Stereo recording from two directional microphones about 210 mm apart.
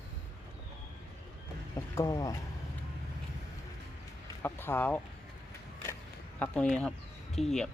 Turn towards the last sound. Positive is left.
turn(degrees=0)  # may be behind; listen again after turning